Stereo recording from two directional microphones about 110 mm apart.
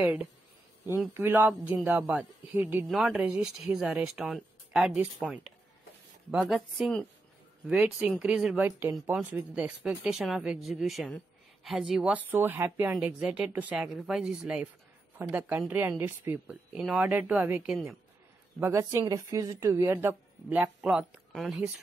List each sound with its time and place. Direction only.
0.0 s speech: 10° right (ahead or behind)
1.1 s a woman's voice: 20° right (ahead or behind)
12.3 s a woman's voice: 20° right (ahead or behind)
13.8 s a woman's voice: 5° right (ahead or behind); by 16.3 s 20° right (ahead or behind)
16.4 s speech: 10° right (ahead or behind)
18.6 s a woman's voice: 25° right (ahead or behind); by 21.6 s 5° right (ahead or behind)